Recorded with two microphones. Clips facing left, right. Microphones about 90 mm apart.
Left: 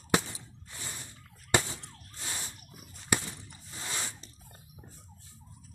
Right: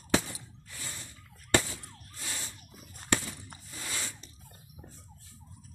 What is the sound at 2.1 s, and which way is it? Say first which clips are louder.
Car alarm: even; 25° left (ahead or behind).